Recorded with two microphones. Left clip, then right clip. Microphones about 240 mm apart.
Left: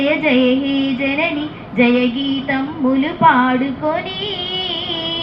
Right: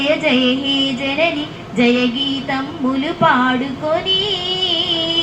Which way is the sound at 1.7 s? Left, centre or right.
Right.